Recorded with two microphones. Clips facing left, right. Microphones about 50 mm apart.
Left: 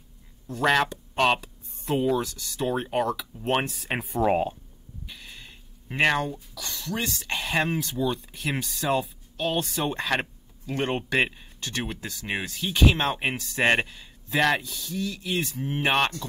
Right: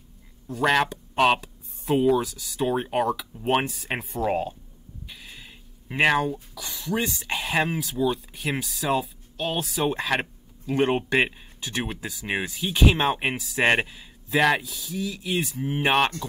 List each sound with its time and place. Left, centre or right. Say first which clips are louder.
0.5 s speech: right 1 dB; centre
4.2 s speech: left 3 dB; centre
5.0 s speech: even; centre